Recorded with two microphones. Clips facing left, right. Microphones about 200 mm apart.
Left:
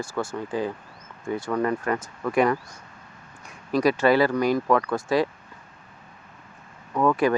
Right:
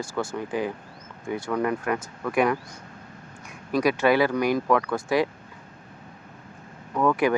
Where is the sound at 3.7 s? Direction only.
10° right (ahead or behind).